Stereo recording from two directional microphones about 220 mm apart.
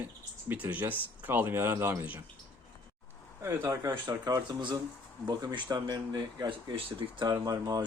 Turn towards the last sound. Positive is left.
turn(degrees=-15)  # may be behind; listen again after turning